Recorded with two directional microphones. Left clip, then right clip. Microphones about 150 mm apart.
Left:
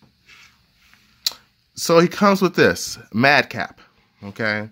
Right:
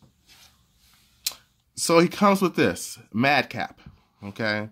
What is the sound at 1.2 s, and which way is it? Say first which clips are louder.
Speech: left 7 dB; 20° left (ahead or behind).